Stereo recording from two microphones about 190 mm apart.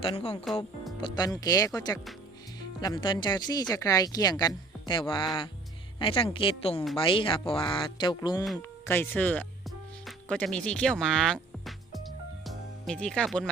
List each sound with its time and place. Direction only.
0.0 s speech: 30° left (ahead or behind); by 13.5 s 5° left (ahead or behind)